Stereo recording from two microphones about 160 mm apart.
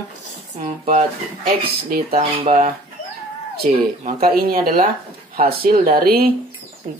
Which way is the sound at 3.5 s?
70° right (ahead or behind).